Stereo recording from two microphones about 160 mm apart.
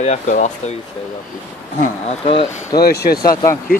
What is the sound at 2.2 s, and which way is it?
Speech, 35° left (ahead or behind).